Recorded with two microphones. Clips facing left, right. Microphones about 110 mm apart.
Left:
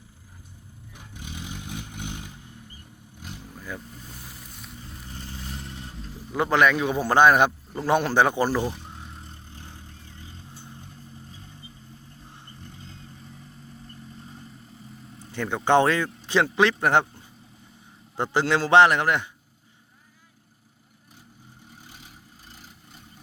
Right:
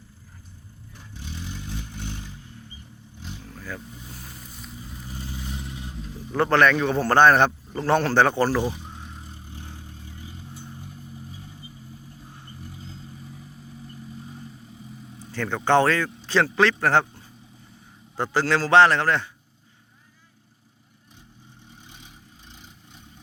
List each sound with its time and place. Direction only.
0.9 s vehicle: 10° left (ahead or behind)
3.8 s vehicle: centre (ahead or behind)
7.9 s a man's voice: 15° left (ahead or behind)
8.6 s vehicle: centre (ahead or behind)
15.3 s a man's voice: 15° left (ahead or behind)
18.2 s a man's voice: 20° left (ahead or behind)
21.7 s vehicle: 5° left (ahead or behind)